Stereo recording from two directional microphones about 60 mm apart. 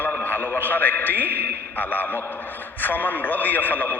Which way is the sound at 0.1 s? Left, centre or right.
Left.